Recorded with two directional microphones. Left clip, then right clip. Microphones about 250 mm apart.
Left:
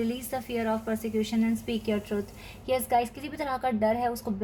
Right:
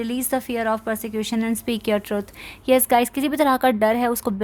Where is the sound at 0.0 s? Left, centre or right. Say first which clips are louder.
Right 7 dB; right.